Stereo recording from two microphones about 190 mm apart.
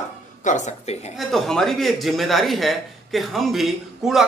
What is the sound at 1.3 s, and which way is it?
Speech, centre (ahead or behind).